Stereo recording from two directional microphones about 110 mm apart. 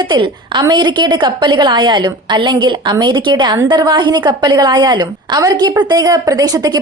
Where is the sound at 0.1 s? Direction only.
45° right (ahead or behind).